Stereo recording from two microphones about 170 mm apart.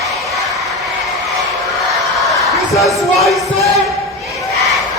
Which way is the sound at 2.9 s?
Centre (ahead or behind).